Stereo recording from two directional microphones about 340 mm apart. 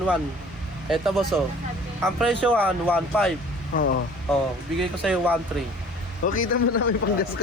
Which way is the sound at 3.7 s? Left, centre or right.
Left.